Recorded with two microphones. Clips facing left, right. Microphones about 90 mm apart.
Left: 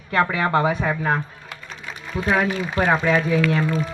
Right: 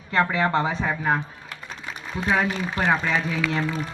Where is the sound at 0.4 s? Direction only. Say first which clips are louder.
Left 3 dB; 10° left (ahead or behind).